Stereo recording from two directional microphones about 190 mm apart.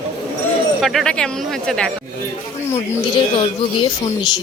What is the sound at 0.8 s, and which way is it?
Speech, centre (ahead or behind).